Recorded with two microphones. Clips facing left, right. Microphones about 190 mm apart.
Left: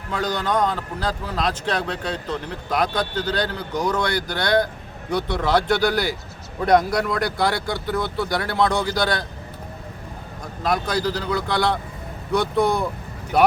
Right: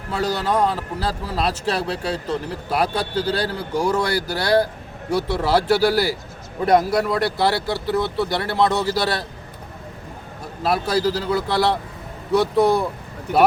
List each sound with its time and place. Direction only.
0.1 s speech: 10° right (ahead or behind)
10.6 s speech: 5° right (ahead or behind)
13.3 s speech: 60° right (ahead or behind)